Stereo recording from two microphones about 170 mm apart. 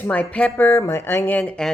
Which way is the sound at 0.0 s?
10° left (ahead or behind).